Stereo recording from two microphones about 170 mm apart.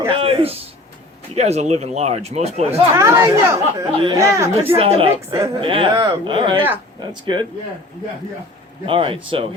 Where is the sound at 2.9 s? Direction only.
15° right (ahead or behind).